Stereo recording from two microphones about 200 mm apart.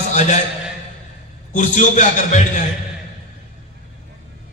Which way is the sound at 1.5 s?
35° left (ahead or behind).